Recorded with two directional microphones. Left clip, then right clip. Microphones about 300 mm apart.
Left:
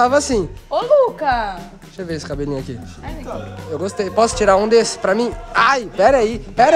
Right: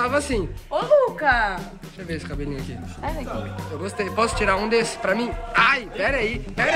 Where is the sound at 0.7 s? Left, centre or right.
Left.